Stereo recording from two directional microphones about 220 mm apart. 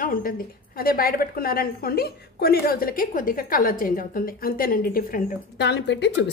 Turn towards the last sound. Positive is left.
turn(degrees=55)  # may be behind; listen again after turning